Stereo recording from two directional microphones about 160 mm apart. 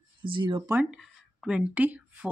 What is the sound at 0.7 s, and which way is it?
Speech, centre (ahead or behind).